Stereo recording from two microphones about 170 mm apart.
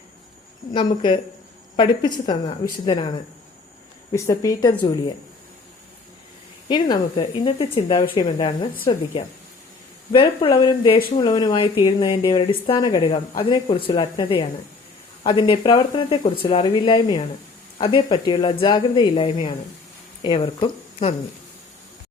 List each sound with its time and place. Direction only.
0.7 s speech: 30° left (ahead or behind)
4.1 s speech: 20° left (ahead or behind)
6.7 s speech: 25° left (ahead or behind)
10.1 s speech: 30° left (ahead or behind)